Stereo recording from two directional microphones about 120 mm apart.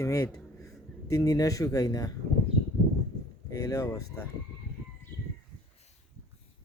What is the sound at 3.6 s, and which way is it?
Speech, 25° left (ahead or behind).